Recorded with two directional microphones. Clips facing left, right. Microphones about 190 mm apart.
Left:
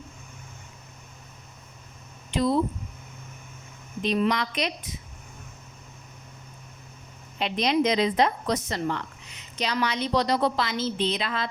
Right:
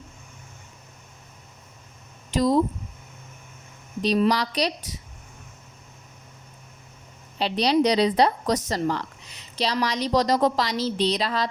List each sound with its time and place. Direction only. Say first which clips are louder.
2.3 s a woman's voice: right 3 dB; 40° right (ahead or behind)
4.0 s a woman's voice: right 3 dB; 35° right (ahead or behind)
7.3 s a woman's voice: right 3 dB; 35° right (ahead or behind)